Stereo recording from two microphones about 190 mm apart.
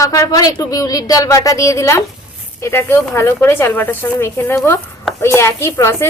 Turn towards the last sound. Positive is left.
turn(degrees=15)  # may be behind; listen again after turning